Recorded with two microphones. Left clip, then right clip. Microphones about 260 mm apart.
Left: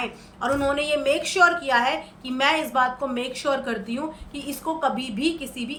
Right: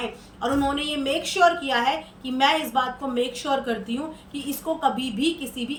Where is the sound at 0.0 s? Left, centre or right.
Centre.